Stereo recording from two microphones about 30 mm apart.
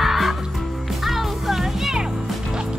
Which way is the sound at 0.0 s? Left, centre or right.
Centre.